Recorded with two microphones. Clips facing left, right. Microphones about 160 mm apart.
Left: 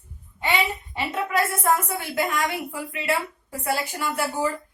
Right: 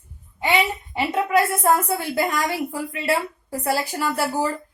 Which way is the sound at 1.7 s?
35° right (ahead or behind).